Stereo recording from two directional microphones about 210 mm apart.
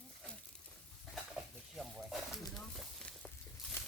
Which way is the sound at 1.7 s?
Centre (ahead or behind).